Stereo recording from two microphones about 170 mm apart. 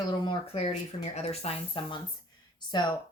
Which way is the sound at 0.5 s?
40° left (ahead or behind).